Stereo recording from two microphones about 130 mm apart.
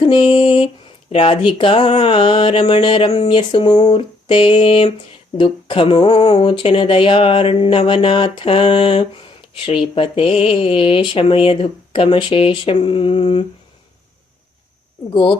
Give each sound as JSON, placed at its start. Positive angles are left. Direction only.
{"t": 0.0, "sound": "a sound", "side_deg": 40}
{"t": 1.1, "sound": "speech", "side_deg": 40}
{"t": 15.1, "sound": "speech", "side_deg": 40}